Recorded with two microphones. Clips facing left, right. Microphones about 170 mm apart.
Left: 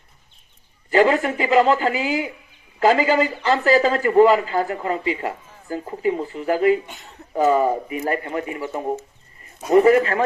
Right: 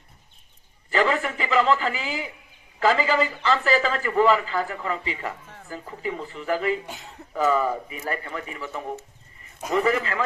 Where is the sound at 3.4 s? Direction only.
40° left (ahead or behind).